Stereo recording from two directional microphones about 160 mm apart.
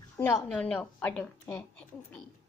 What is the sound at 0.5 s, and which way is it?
A woman's voice, 5° left (ahead or behind).